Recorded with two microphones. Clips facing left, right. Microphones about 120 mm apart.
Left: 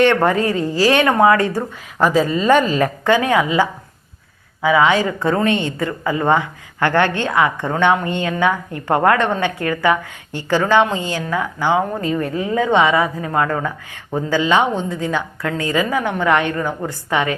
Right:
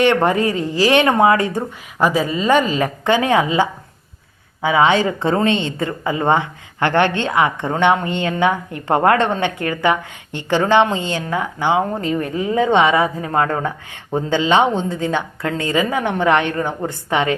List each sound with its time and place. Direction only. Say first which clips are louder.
0.0 s a woman's voice: even; 15° right (ahead or behind)